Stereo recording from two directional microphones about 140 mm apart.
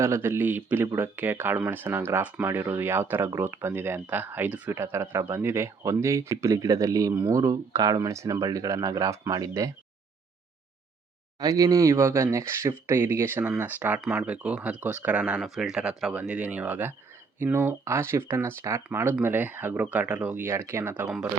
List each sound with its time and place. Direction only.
0.0 s speech: 20° right (ahead or behind)
11.3 s speech: 25° right (ahead or behind)